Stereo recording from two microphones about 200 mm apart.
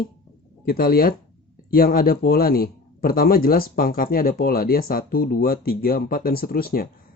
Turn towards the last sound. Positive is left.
turn(degrees=50)  # may be behind; listen again after turning